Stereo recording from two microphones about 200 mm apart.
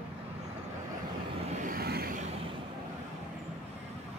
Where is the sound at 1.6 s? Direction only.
45° right (ahead or behind).